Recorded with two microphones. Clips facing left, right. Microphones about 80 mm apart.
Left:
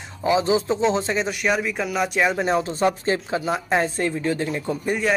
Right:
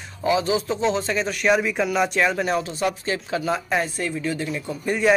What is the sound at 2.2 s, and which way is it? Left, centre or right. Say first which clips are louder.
Speech: left 1 dB; left.